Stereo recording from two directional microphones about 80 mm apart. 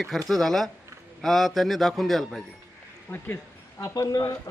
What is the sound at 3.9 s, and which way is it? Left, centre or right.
Speech, left.